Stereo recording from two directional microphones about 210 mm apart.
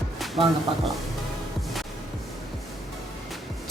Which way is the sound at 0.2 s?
Centre (ahead or behind).